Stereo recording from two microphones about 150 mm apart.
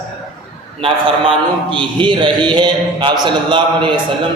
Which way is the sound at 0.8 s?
35° right (ahead or behind).